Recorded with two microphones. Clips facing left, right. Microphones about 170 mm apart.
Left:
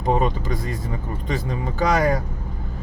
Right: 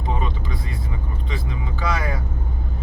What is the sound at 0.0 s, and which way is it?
Vehicle, 45° left (ahead or behind).